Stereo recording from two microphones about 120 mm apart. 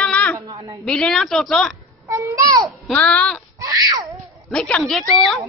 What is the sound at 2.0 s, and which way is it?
Speech, 25° right (ahead or behind).